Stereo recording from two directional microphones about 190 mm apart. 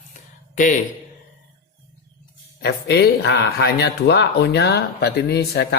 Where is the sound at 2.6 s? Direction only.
60° left (ahead or behind).